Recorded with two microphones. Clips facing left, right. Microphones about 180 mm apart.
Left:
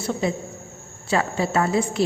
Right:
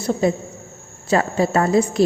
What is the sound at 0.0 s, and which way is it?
A man's voice, 40° right (ahead or behind).